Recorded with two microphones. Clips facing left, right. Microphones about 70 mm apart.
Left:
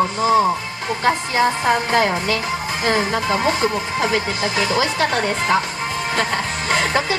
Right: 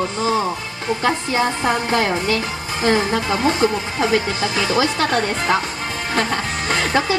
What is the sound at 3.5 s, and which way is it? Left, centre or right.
Speech, right.